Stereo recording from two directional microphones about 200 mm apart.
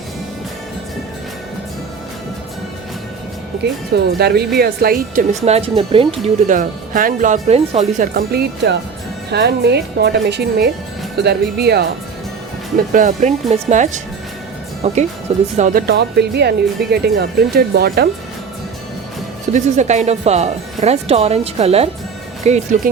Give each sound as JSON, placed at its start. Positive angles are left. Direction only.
{"t": 3.6, "sound": "speech", "side_deg": -55}
{"t": 5.5, "sound": "speech", "side_deg": -30}
{"t": 6.2, "sound": "a woman's voice", "side_deg": -40}
{"t": 12.7, "sound": "speech", "side_deg": -40}
{"t": 15.9, "sound": "speech", "side_deg": -55}
{"t": 19.5, "sound": "speech", "side_deg": -35}